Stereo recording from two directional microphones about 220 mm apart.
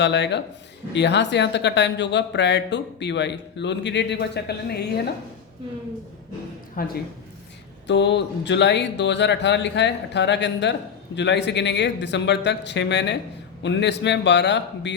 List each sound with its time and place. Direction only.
0.0 s speech: 50° left (ahead or behind)
6.8 s speech: 40° left (ahead or behind)
7.9 s speech: 55° left (ahead or behind)